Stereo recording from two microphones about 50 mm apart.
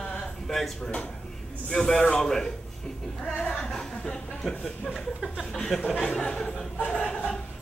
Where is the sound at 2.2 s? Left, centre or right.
Centre.